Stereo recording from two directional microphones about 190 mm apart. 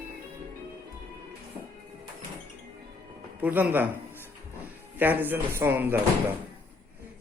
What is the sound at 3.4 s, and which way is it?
A man's voice, 10° right (ahead or behind).